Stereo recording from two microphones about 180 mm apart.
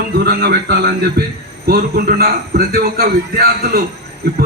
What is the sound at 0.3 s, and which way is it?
A man's voice, 65° right (ahead or behind).